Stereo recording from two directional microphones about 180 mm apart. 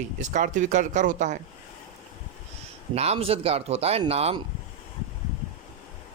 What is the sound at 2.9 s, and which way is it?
Speech, 35° right (ahead or behind).